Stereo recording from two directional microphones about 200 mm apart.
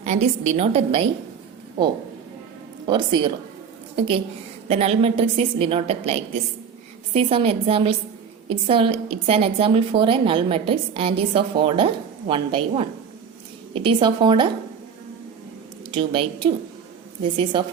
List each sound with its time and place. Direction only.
0.0 s a woman's voice: 35° right (ahead or behind)
2.8 s a woman's voice: 25° right (ahead or behind)
16.0 s a woman's voice: 25° right (ahead or behind)